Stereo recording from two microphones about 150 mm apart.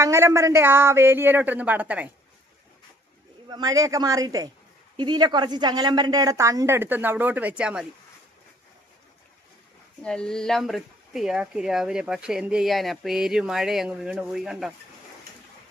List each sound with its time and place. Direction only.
0.0 s speech: 20° right (ahead or behind)
3.5 s speech: 25° right (ahead or behind); by 7.9 s 5° right (ahead or behind)
10.0 s speech: 5° left (ahead or behind)